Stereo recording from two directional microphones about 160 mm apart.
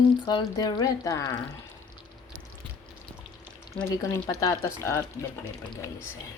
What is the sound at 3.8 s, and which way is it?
Speech, 5° left (ahead or behind).